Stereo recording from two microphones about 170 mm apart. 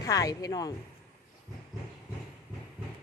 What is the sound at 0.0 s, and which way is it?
Speech, 20° left (ahead or behind).